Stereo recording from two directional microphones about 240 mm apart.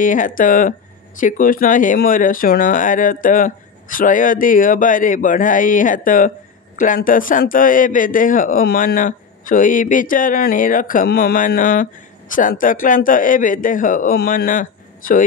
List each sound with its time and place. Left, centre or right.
0.0 s speech: left